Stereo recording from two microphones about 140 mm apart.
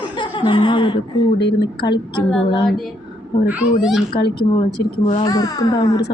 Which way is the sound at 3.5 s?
5° right (ahead or behind).